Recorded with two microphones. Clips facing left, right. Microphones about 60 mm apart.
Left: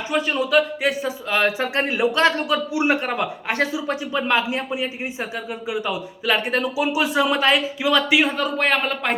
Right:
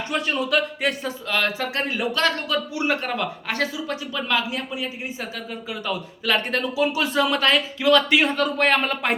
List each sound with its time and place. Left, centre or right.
0.1 s speech: centre
1.3 s a man's voice: centre